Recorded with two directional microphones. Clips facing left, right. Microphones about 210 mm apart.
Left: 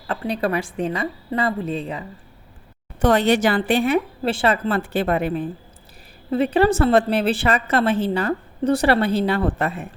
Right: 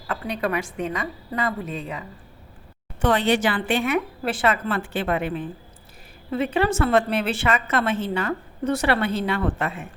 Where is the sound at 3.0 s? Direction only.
40° left (ahead or behind).